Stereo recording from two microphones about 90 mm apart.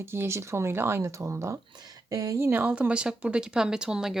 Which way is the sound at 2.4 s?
20° right (ahead or behind).